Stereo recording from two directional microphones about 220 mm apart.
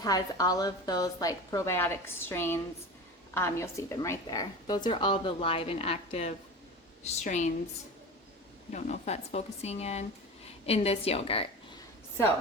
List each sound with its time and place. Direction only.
0.0 s a woman's voice: 15° left (ahead or behind); by 7.5 s 30° left (ahead or behind)
8.7 s a woman's voice: 30° left (ahead or behind)